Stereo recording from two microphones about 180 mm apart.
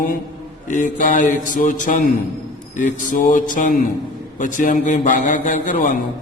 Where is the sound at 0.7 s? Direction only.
45° left (ahead or behind).